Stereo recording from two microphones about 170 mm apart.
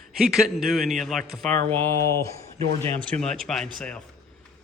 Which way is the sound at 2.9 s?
5° left (ahead or behind).